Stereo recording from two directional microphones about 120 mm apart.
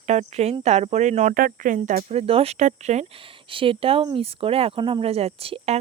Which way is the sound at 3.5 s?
45° right (ahead or behind).